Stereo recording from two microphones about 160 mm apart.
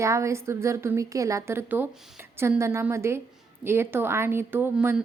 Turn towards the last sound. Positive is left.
turn(degrees=-15)  # may be behind; listen again after turning